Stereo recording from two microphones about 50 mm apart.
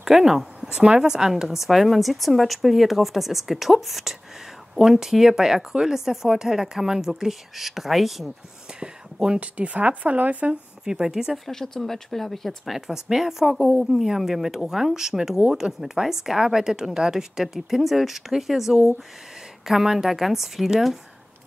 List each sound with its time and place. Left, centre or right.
0.0 s a woman's voice: centre
8.7 s a sound: centre
9.4 s a woman's voice: right
10.9 s speech: centre
11.3 s a woman's voice: centre